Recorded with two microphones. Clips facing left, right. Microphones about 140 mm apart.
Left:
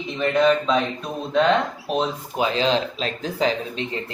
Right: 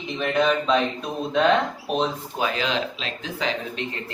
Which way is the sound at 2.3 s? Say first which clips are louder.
Left 6 dB; 25° left (ahead or behind).